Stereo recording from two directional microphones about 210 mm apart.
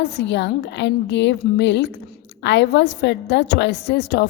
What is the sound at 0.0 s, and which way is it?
A woman's voice, 55° left (ahead or behind).